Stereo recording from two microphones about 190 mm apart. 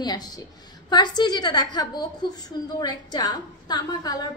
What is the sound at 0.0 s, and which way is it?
A woman's voice, 20° left (ahead or behind).